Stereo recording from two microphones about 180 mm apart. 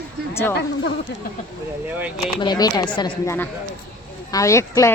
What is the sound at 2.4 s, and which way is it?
Speech, 25° left (ahead or behind).